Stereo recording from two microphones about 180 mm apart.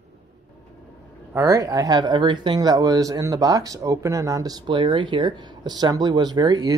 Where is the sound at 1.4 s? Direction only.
20° right (ahead or behind).